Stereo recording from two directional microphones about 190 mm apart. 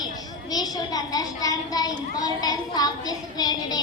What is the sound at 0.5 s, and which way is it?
A child's voice, 20° left (ahead or behind).